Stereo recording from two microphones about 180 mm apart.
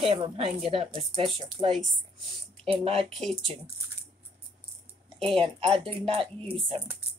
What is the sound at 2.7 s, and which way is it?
Speech, 35° right (ahead or behind).